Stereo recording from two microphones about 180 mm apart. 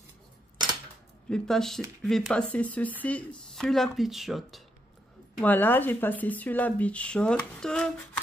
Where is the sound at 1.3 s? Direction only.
5° left (ahead or behind).